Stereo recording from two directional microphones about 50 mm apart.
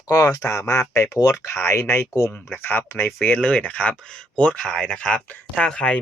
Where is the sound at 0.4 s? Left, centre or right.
Left.